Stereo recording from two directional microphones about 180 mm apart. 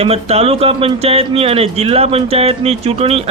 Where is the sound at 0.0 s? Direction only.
35° right (ahead or behind).